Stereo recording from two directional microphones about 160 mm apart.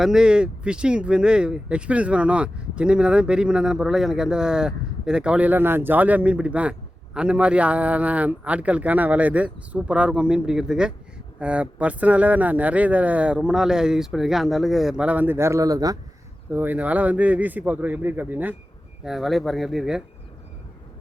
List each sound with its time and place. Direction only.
0.0 s speech: 5° right (ahead or behind); by 16.0 s 20° right (ahead or behind)
16.5 s speech: 10° right (ahead or behind)